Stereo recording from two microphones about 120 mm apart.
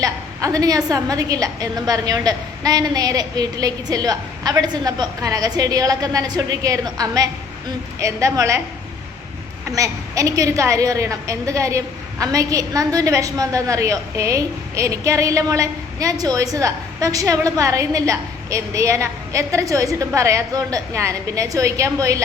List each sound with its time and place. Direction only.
0.0 s a woman's voice: 30° right (ahead or behind)
9.7 s a woman's voice: 30° right (ahead or behind)